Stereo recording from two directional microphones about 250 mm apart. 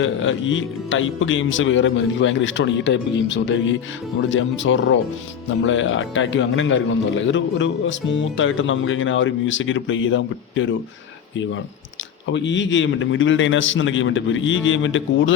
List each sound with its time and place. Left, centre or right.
0.0 s speech: left
12.3 s speech: left